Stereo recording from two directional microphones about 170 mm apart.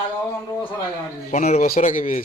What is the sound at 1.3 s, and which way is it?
Speech, 45° left (ahead or behind).